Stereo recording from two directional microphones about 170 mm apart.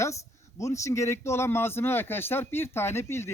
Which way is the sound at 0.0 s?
15° left (ahead or behind).